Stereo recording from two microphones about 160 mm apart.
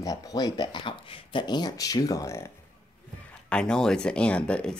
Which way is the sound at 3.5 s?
5° left (ahead or behind).